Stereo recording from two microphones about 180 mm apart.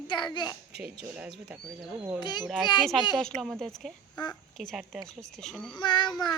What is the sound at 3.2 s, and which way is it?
Speech, 5° left (ahead or behind).